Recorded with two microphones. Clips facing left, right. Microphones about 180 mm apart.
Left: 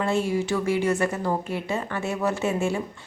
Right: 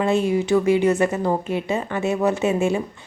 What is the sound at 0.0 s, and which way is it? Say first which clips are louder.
Speech: right 4 dB; 20° right (ahead or behind).